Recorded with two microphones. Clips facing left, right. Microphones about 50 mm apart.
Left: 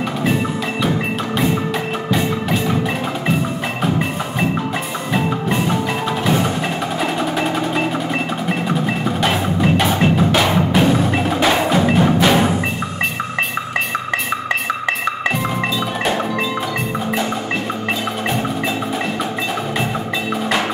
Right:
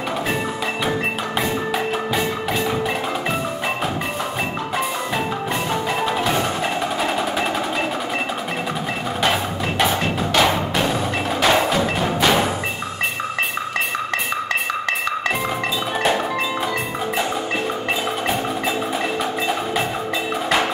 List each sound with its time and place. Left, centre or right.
2.0 s music: centre
5.1 s music: centre
9.2 s percussion: centre